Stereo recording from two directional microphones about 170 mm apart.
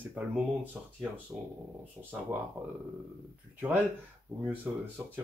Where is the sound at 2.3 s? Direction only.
15° right (ahead or behind).